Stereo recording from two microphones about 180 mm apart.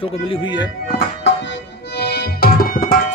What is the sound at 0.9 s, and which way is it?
Tabla, 70° left (ahead or behind).